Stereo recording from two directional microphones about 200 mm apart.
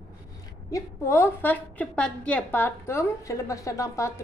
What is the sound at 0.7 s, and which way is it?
A woman's voice, 15° left (ahead or behind).